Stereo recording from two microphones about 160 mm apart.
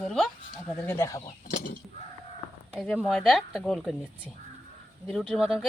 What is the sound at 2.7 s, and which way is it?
Speech, 5° left (ahead or behind).